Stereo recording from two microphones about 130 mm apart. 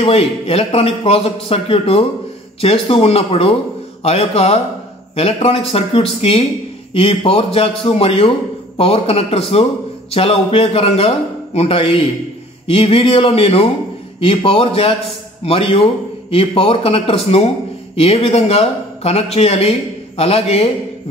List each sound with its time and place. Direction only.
0.0 s a man's voice: 45° left (ahead or behind)